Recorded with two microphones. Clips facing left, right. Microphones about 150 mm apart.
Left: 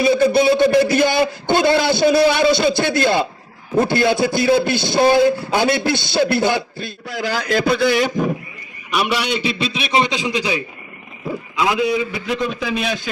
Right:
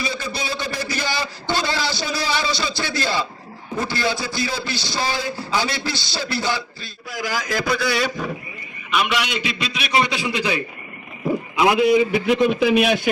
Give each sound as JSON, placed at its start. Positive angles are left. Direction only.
{"t": 0.0, "sound": "a man's voice", "side_deg": 55}
{"t": 7.7, "sound": "a man's voice", "side_deg": 20}
{"t": 9.0, "sound": "a man's voice", "side_deg": 30}
{"t": 11.3, "sound": "a man's voice", "side_deg": -20}